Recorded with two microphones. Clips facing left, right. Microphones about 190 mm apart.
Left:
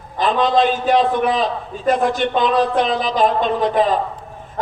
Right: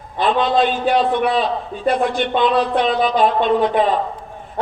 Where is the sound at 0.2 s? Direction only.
40° left (ahead or behind).